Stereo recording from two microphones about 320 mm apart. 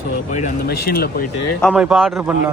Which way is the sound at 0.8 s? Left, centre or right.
Left.